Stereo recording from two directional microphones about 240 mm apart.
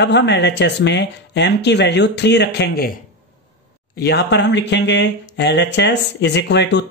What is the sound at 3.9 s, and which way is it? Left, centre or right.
Speech, left.